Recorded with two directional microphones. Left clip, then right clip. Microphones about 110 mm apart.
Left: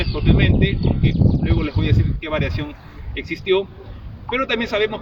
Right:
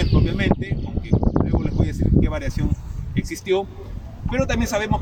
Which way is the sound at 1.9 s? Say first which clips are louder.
Even; 20° right (ahead or behind).